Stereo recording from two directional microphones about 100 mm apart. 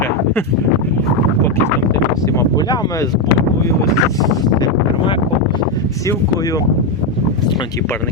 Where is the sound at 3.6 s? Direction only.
35° left (ahead or behind).